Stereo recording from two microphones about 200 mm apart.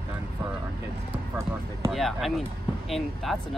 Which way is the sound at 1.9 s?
Centre (ahead or behind).